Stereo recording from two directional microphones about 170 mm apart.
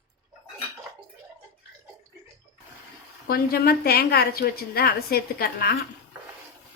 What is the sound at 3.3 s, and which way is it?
A woman's voice, 65° left (ahead or behind).